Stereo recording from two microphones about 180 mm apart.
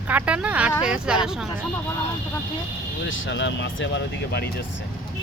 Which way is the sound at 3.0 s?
85° left.